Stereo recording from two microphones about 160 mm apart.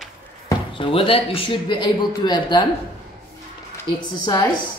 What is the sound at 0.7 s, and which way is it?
A man's voice, 35° left (ahead or behind).